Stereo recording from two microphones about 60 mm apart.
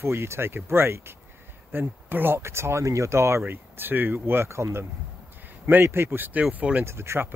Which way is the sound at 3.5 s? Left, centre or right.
Right.